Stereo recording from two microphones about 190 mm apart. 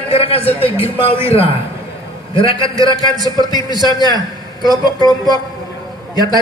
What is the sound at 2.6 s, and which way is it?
Speech, 20° right (ahead or behind).